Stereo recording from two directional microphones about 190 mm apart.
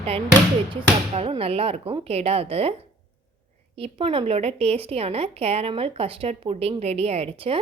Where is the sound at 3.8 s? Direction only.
30° right (ahead or behind).